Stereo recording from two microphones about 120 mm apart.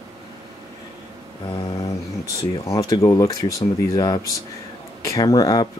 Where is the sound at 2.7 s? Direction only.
30° left (ahead or behind).